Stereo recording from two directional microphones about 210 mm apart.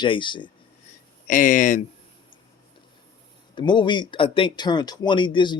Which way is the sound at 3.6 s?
20° left (ahead or behind).